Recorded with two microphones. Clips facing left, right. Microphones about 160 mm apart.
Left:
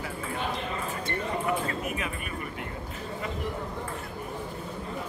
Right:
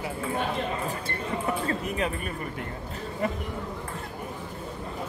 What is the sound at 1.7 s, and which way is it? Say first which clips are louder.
Speech: right 4 dB; 35° right (ahead or behind).